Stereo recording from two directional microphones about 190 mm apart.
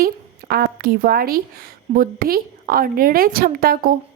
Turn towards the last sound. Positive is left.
turn(degrees=-50)  # may be behind; listen again after turning